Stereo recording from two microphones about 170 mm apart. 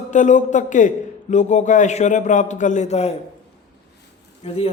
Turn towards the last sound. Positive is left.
turn(degrees=35)  # may be behind; listen again after turning